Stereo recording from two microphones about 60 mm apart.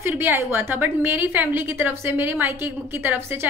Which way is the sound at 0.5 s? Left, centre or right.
Right.